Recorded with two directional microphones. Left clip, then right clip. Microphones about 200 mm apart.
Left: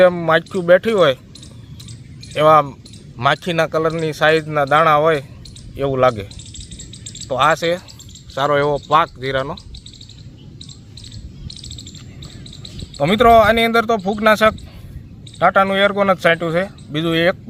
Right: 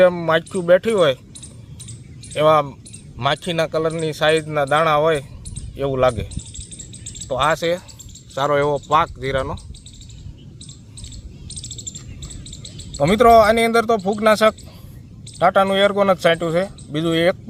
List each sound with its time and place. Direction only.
0.0 s speech: 5° left (ahead or behind)
2.3 s speech: 10° left (ahead or behind)
7.3 s speech: 10° left (ahead or behind)
11.4 s chirp: 60° right (ahead or behind)
13.0 s speech: 5° right (ahead or behind)